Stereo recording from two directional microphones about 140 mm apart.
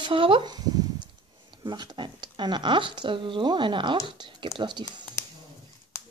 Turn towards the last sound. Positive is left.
turn(degrees=-30)  # may be behind; listen again after turning